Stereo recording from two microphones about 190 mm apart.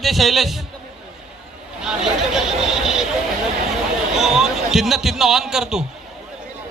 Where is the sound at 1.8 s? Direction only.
5° right (ahead or behind).